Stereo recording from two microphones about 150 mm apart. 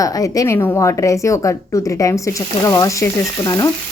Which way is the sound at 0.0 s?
25° left (ahead or behind).